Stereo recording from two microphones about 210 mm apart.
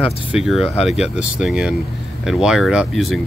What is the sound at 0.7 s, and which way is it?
Speech, 30° left (ahead or behind).